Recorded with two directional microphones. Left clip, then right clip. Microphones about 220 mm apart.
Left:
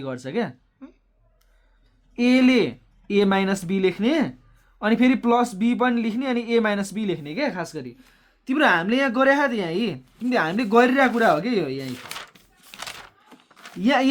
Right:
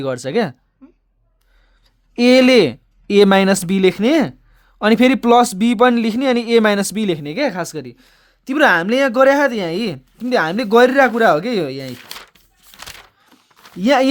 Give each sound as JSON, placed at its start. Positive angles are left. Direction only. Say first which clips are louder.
{"t": 0.0, "sound": "a man's voice", "louder": "right 9 dB", "side_deg": -50}
{"t": 2.1, "sound": "a man's voice", "louder": "right 9 dB", "side_deg": -50}
{"t": 13.8, "sound": "a man's voice", "louder": "right 7 dB", "side_deg": -50}